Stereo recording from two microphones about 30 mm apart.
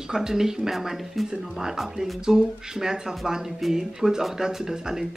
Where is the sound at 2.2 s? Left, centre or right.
Centre.